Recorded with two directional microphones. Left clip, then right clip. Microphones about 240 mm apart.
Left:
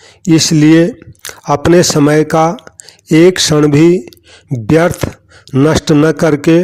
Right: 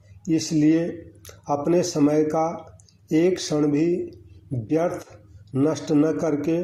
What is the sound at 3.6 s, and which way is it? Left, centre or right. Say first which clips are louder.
A man's voice: left 12 dB; left.